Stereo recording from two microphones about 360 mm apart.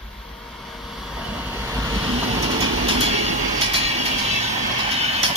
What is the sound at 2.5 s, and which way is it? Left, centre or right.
Train, right.